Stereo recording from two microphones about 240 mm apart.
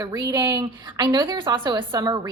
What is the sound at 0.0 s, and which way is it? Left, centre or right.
A woman's voice, centre.